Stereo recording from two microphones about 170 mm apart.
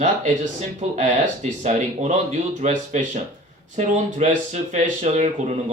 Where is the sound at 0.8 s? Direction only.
45° right (ahead or behind).